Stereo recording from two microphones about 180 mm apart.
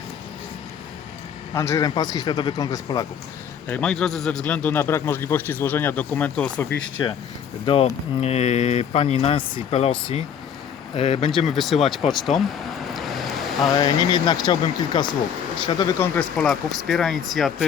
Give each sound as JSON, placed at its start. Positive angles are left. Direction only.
{"t": 1.5, "sound": "a man's voice", "side_deg": 15}
{"t": 3.7, "sound": "a man's voice", "side_deg": 5}
{"t": 7.6, "sound": "speech", "side_deg": 30}
{"t": 10.9, "sound": "a man's voice", "side_deg": 30}
{"t": 11.3, "sound": "speech", "side_deg": 0}
{"t": 13.7, "sound": "a man's voice", "side_deg": 25}
{"t": 16.0, "sound": "speech", "side_deg": 5}